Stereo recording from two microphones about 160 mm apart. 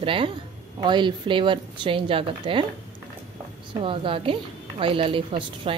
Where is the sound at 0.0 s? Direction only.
35° right (ahead or behind).